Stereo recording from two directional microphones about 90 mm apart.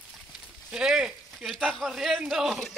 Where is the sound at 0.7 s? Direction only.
5° right (ahead or behind).